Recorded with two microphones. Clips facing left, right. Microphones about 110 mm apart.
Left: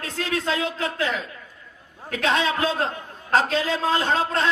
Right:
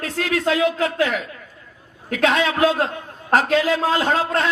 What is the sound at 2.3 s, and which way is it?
A man's voice, 30° left (ahead or behind).